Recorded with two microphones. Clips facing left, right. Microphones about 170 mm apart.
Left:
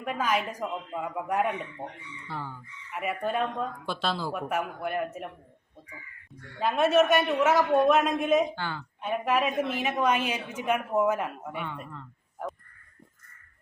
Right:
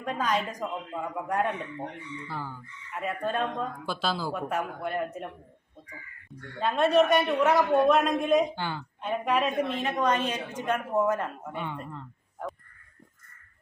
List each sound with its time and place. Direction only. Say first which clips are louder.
0.0 s a woman's voice: even; 5° left (ahead or behind)
3.0 s speech: left 1 dB; 10° left (ahead or behind)
6.6 s speech: even; 5° left (ahead or behind)
8.5 s speech: right 1 dB; 15° right (ahead or behind)
9.0 s a woman's voice: even; centre (ahead or behind)